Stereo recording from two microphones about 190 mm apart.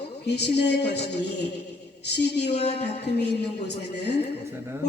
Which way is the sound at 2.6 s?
35° left (ahead or behind).